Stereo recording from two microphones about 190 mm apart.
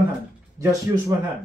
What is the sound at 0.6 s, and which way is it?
Speech, 15° right (ahead or behind).